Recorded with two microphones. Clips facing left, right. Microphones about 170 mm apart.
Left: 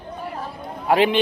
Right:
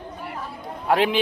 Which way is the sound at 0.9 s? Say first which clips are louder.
Left 3 dB; centre (ahead or behind).